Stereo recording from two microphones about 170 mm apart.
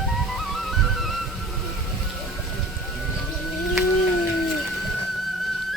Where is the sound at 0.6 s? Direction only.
Centre (ahead or behind).